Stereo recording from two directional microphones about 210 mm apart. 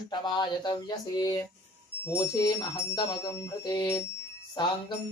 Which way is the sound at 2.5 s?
25° left (ahead or behind).